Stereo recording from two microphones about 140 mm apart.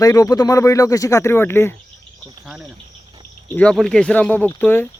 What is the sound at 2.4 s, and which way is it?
Cricket, 5° right (ahead or behind).